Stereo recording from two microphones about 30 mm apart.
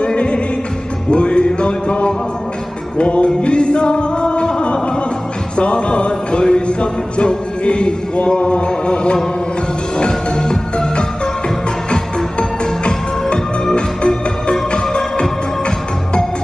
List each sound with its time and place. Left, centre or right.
0.0 s music: left
3.0 s chant: left
3.3 s music: left
8.4 s chant: left
9.9 s music: left